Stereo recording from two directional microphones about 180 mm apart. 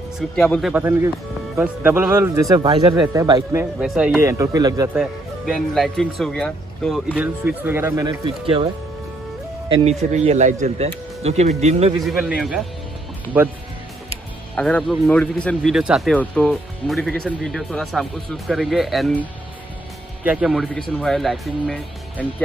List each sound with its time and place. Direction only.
0.4 s speech: centre (ahead or behind); by 3.6 s 20° right (ahead or behind)
3.8 s speech: 5° right (ahead or behind); by 4.9 s 20° right (ahead or behind)
4.9 s a man's voice: centre (ahead or behind)
7.2 s speech: 10° right (ahead or behind)
10.1 s speech: 40° right (ahead or behind)
12.0 s a man's voice: 5° right (ahead or behind)
14.5 s a man's voice: 5° left (ahead or behind)
20.2 s a man's voice: 5° right (ahead or behind)